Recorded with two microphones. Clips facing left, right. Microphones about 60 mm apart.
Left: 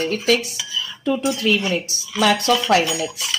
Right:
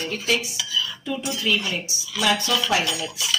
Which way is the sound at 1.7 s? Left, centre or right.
Left.